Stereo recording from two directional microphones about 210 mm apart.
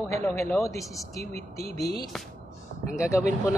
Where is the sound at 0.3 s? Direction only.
10° left (ahead or behind).